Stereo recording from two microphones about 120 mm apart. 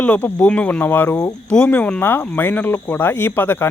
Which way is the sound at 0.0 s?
15° left (ahead or behind).